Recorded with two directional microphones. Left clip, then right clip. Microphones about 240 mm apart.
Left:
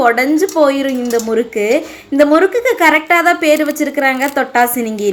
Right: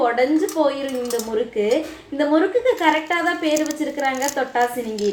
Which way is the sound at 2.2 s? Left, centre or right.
Left.